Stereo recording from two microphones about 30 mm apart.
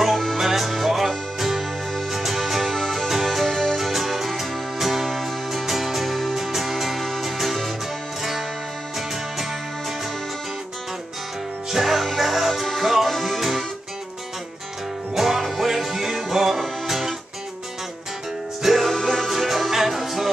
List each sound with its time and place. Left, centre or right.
0.4 s music: centre
3.7 s music: centre
6.3 s music: centre
11.7 s music: centre
15.1 s music: centre
18.6 s music: centre